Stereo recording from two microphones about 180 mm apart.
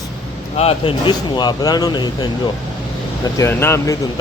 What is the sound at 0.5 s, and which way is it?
Speech, 35° left (ahead or behind).